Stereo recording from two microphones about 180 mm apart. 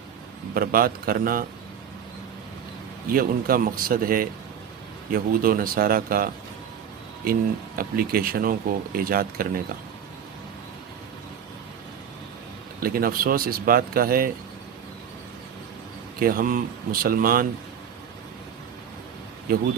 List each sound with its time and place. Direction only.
0.6 s speech: 55° right (ahead or behind)
3.1 s speech: 50° right (ahead or behind)
12.8 s speech: 55° right (ahead or behind)
16.2 s speech: 50° right (ahead or behind)